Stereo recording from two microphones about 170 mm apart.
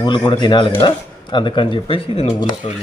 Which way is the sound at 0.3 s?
25° left (ahead or behind).